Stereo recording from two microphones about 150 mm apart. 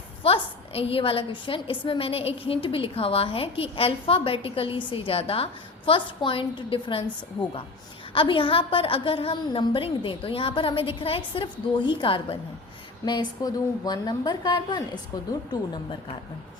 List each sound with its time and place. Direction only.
0.2 s a woman's voice: 40° left (ahead or behind)
8.1 s a woman's voice: 35° left (ahead or behind)